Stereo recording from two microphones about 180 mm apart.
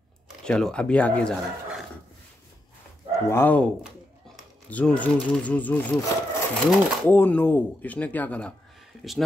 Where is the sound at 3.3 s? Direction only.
10° left (ahead or behind).